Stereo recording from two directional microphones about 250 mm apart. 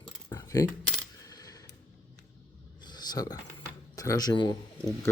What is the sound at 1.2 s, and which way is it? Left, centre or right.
Coin, centre.